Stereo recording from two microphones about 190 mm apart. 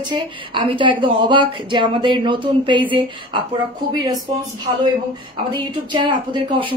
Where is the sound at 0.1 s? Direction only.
25° right (ahead or behind).